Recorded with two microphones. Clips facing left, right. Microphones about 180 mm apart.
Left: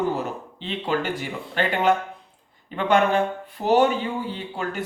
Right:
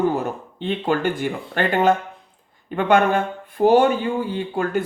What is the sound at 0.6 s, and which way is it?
Speech, 50° right (ahead or behind).